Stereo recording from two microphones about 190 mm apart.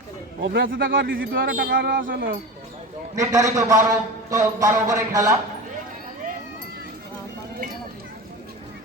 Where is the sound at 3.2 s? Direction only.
20° right (ahead or behind).